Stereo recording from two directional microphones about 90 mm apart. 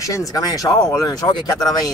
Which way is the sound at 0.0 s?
40° left (ahead or behind).